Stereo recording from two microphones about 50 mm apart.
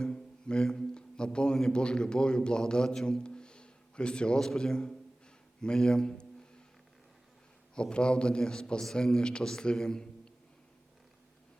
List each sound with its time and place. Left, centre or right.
0.0 s a sound: centre
1.7 s a man's voice: centre
7.8 s a man's voice: centre